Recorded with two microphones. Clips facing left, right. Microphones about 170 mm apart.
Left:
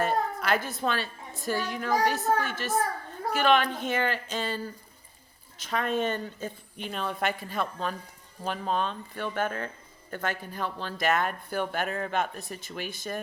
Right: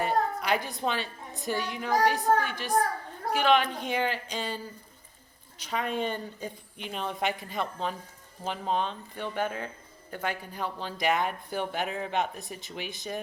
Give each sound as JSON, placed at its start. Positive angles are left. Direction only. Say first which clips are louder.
{"t": 0.0, "sound": "a woman's voice", "louder": "even", "side_deg": -15}